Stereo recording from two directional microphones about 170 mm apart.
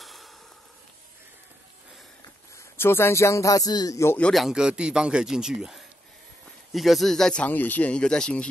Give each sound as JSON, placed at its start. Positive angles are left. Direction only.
{"t": 0.0, "sound": "a sound", "side_deg": 0}
{"t": 2.5, "sound": "speech", "side_deg": 15}
{"t": 4.3, "sound": "speech", "side_deg": 0}